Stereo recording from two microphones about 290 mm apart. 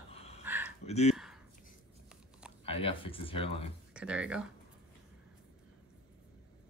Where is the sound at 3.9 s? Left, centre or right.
Centre.